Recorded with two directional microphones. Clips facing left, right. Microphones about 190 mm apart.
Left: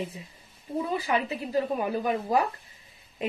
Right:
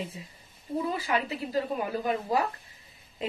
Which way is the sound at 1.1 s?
20° left (ahead or behind).